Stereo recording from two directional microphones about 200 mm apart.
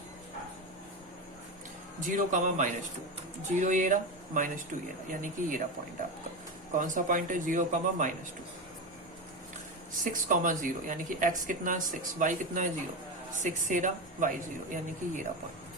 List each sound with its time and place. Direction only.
2.0 s speech: 40° right (ahead or behind)
6.7 s speech: 40° right (ahead or behind)
10.0 s speech: 40° right (ahead or behind)